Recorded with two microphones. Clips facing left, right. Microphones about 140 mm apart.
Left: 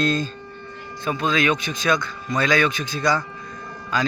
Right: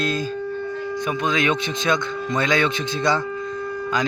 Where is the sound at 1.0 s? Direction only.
20° right (ahead or behind).